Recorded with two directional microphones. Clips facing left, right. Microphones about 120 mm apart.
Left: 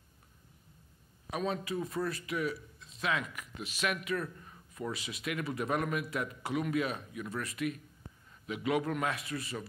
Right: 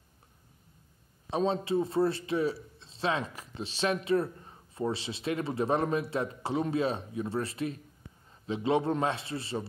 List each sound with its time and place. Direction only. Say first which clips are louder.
1.3 s a man's voice: right 6 dB; 30° right (ahead or behind)